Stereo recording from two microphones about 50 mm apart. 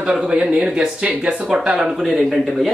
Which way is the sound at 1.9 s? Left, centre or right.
Centre.